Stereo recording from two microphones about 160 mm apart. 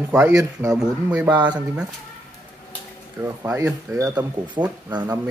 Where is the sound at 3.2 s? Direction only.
15° right (ahead or behind).